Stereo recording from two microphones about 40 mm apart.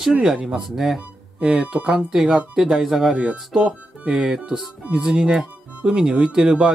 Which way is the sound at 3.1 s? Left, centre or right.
Right.